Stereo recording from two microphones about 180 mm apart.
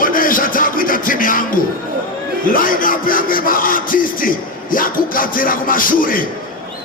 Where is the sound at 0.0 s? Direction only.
50° left (ahead or behind).